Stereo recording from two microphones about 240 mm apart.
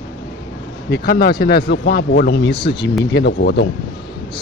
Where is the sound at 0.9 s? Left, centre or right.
Left.